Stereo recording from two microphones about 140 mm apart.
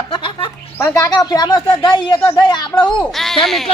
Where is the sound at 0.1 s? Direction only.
40° left (ahead or behind).